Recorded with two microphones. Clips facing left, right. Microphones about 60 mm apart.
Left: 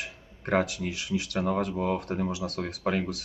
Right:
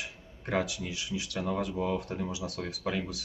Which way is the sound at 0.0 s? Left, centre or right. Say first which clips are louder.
Left 3 dB; left.